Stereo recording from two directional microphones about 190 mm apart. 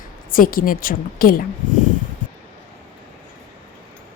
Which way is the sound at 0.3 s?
45° left (ahead or behind).